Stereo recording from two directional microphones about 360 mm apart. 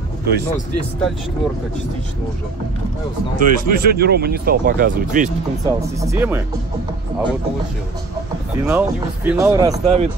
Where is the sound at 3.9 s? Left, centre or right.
Right.